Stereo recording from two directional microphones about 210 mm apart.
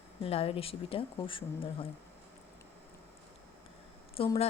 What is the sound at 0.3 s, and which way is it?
A woman's voice, 25° left (ahead or behind).